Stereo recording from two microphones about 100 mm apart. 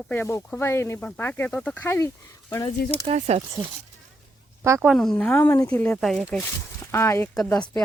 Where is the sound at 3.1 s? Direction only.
90° right.